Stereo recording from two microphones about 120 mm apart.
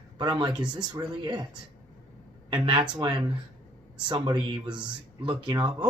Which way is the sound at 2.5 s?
40° right (ahead or behind).